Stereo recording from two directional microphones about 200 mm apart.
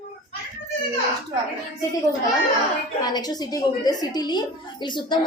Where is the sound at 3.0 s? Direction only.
20° left (ahead or behind).